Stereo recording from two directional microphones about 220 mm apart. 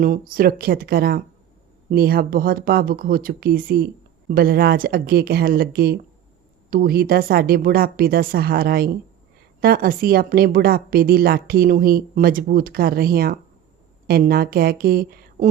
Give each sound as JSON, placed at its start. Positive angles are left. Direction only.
{"t": 0.0, "sound": "a woman's voice", "side_deg": -40}